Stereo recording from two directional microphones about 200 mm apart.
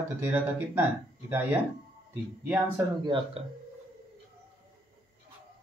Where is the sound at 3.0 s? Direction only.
25° right (ahead or behind).